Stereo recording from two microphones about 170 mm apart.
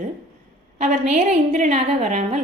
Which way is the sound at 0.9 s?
40° right (ahead or behind).